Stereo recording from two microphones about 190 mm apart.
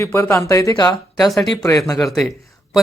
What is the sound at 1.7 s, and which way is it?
Speech, 15° left (ahead or behind).